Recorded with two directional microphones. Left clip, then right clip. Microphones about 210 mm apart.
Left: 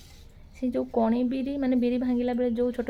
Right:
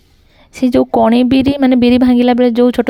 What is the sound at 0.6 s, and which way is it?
Speech, 50° right (ahead or behind).